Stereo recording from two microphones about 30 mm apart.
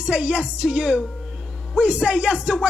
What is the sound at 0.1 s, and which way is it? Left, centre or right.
Speech, right.